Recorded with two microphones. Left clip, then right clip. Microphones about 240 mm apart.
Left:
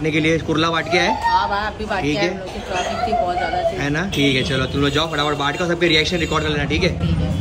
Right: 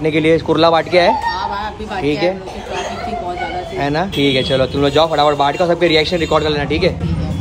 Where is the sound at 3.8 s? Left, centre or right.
Centre.